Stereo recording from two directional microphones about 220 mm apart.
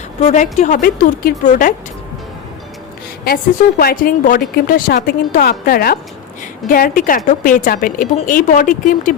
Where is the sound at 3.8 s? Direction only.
40° left (ahead or behind).